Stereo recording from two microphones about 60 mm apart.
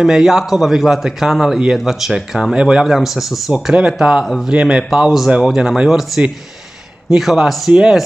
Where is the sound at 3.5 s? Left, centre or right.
Centre.